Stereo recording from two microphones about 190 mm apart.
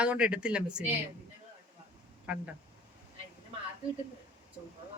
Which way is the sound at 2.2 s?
5° right (ahead or behind).